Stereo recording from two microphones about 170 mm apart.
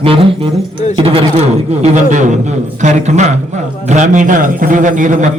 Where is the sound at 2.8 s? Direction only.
40° right (ahead or behind).